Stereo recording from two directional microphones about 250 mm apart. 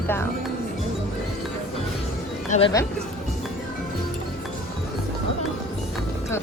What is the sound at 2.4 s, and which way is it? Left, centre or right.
Speech, left.